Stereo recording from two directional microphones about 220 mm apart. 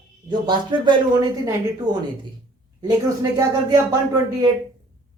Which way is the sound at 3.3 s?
15° right (ahead or behind).